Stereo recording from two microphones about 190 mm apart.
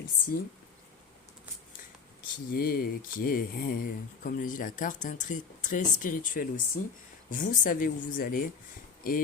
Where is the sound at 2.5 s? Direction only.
50° left (ahead or behind).